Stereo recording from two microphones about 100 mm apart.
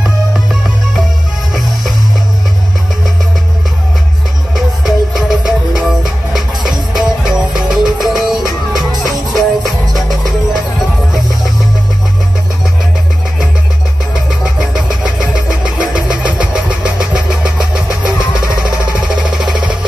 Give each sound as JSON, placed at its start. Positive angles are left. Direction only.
{"t": 0.0, "sound": "music", "side_deg": -5}
{"t": 4.6, "sound": "music", "side_deg": -5}
{"t": 14.7, "sound": "vehicle", "side_deg": -5}
{"t": 18.6, "sound": "music", "side_deg": -5}